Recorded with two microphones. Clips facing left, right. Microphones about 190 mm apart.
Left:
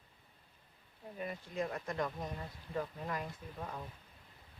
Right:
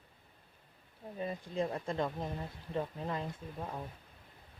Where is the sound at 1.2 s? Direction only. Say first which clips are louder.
Right 3 dB; 30° right (ahead or behind).